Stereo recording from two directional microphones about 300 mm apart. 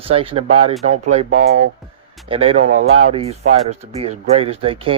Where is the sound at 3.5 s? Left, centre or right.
Right.